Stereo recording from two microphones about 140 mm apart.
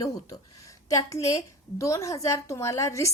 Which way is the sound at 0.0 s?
25° left (ahead or behind).